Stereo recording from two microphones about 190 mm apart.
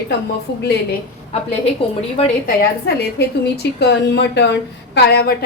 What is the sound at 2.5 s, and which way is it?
A woman's voice, 55° left (ahead or behind).